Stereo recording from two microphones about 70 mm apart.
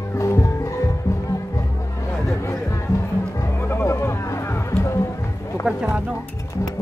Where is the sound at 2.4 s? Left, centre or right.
Left.